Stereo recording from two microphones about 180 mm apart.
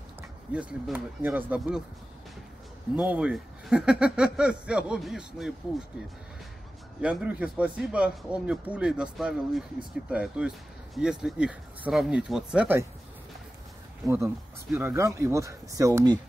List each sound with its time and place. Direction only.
0.5 s speech: 5° right (ahead or behind)
3.0 s speech: 5° right (ahead or behind)
7.0 s speech: 5° right (ahead or behind)
14.0 s speech: 15° right (ahead or behind)